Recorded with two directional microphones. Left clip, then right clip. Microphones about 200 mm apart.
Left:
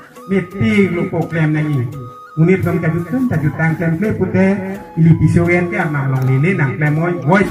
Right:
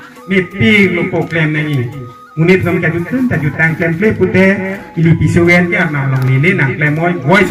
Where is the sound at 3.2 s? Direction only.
45° right (ahead or behind).